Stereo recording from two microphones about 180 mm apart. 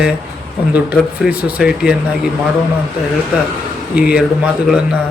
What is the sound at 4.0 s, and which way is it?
Speech, 5° right (ahead or behind).